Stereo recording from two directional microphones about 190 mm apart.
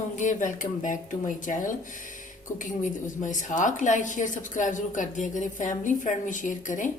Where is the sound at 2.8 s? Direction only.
40° left (ahead or behind).